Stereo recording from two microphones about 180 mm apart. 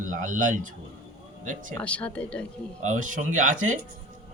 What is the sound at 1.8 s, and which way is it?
Speech, 5° left (ahead or behind).